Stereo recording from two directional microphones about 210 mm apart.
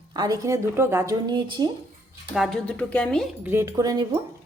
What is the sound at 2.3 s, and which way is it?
Speech, centre (ahead or behind).